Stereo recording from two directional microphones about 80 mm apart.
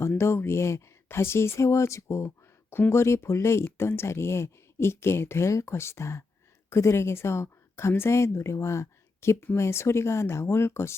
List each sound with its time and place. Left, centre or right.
0.2 s a woman's voice: left